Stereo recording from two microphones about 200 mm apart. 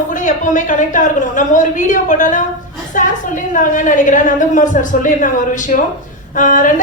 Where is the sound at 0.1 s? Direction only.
40° left (ahead or behind).